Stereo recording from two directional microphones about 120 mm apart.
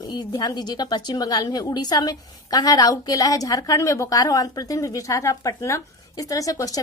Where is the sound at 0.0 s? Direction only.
35° left (ahead or behind).